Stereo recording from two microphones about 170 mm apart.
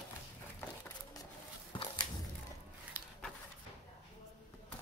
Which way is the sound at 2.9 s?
10° right (ahead or behind).